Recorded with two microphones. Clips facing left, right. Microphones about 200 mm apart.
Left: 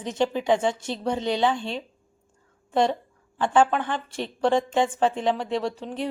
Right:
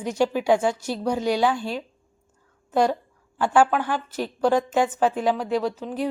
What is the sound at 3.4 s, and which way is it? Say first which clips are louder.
Speech: right 1 dB; 5° right (ahead or behind).